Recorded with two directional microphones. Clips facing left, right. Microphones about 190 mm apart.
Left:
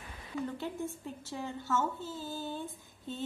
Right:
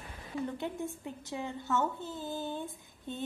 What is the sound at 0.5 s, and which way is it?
A woman's voice, 15° right (ahead or behind).